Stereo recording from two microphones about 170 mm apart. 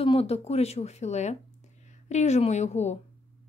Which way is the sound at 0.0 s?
35° left (ahead or behind).